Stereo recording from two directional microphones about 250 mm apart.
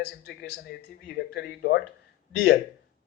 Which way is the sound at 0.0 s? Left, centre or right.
Left.